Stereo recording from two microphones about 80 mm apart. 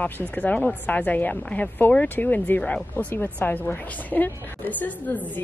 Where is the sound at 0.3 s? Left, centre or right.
Left.